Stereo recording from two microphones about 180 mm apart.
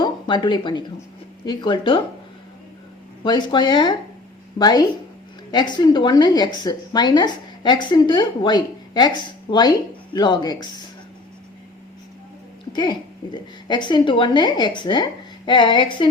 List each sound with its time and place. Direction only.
0.0 s a woman's voice: 25° left (ahead or behind)
3.2 s a woman's voice: 25° left (ahead or behind)
12.7 s a woman's voice: 25° left (ahead or behind)